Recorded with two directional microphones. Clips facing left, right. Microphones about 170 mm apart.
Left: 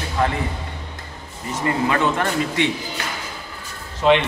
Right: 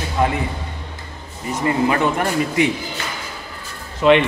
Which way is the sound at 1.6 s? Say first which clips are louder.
Right 2 dB; 20° right (ahead or behind).